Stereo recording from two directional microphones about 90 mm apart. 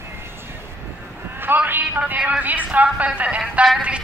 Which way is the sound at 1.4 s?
20° right (ahead or behind).